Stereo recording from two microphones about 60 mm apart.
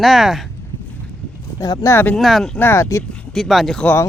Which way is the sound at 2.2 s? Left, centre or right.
Centre.